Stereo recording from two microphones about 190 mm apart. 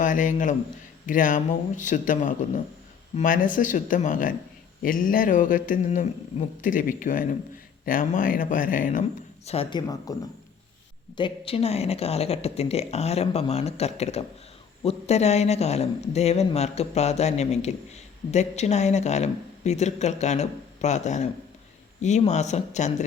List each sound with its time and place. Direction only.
0.0 s a man's voice: 45° left (ahead or behind)
1.0 s a sound: 45° left (ahead or behind)
9.5 s speech: 25° left (ahead or behind)
11.2 s a woman's voice: 30° left (ahead or behind)